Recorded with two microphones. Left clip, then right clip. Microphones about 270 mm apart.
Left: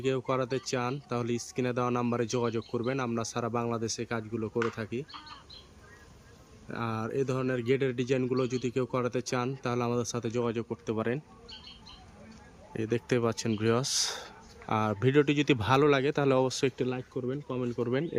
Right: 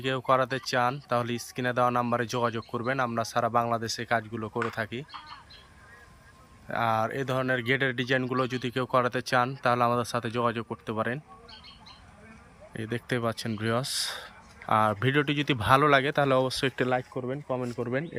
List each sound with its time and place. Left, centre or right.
0.0 s speech: centre
6.7 s speech: centre
12.7 s speech: centre